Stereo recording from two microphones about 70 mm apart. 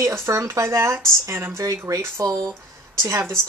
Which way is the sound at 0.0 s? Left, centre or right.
Right.